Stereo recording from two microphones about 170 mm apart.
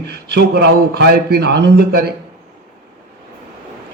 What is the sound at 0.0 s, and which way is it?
A man's voice, 75° right (ahead or behind).